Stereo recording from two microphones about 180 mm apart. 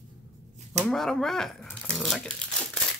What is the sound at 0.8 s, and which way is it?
Speech, centre (ahead or behind).